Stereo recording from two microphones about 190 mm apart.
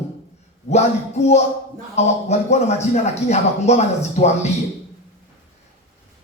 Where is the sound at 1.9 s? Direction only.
35° left (ahead or behind).